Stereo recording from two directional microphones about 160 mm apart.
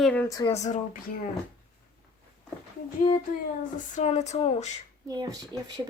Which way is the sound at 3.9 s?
45° left (ahead or behind).